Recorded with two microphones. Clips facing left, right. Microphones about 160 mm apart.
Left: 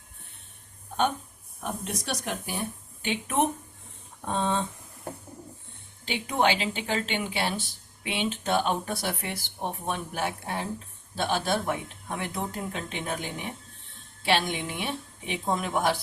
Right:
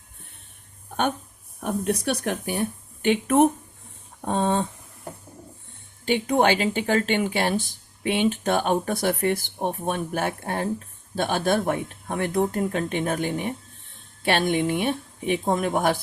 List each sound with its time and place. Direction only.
1.6 s speech: 60° right (ahead or behind)
6.1 s speech: 45° right (ahead or behind)